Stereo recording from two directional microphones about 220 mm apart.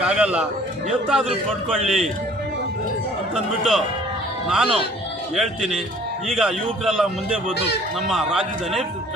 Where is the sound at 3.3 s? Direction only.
Centre (ahead or behind).